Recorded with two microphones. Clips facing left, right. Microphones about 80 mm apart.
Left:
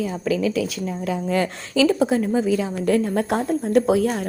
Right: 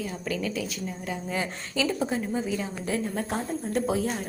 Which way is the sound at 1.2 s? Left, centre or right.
Left.